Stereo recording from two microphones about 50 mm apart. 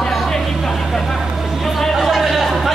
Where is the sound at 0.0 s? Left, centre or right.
Centre.